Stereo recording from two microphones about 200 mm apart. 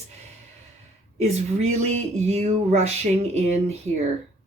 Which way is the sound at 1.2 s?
35° right (ahead or behind).